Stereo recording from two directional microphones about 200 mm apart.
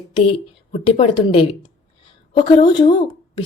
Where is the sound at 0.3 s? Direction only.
30° left (ahead or behind).